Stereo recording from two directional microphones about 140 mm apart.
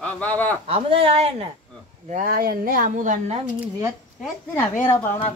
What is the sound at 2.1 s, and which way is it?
Speech, 90° right.